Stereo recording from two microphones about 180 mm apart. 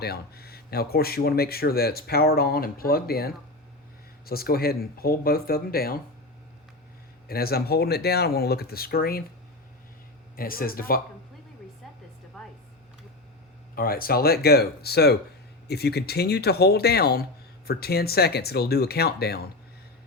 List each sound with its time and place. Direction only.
0.0 s speech: 60° left (ahead or behind)
7.3 s speech: 60° left (ahead or behind)
10.3 s speech: 55° left (ahead or behind)
12.4 s a sound: 5° left (ahead or behind)
13.7 s speech: 55° left (ahead or behind)